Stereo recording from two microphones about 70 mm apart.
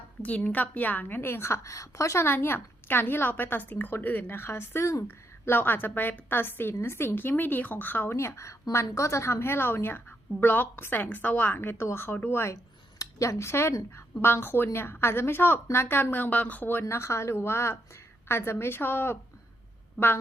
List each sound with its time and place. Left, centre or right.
0.2 s a woman's voice: centre; by 5.0 s left
5.0 s a woman's voice: left
8.1 s a woman's voice: left
13.0 s a woman's voice: left
16.8 s a woman's voice: left